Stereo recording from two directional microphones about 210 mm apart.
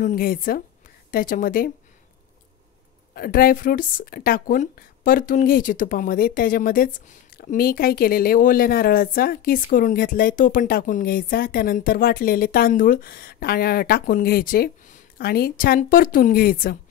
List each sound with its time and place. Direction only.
0.0 s a woman's voice: 45° left (ahead or behind)
3.2 s speech: 45° left (ahead or behind)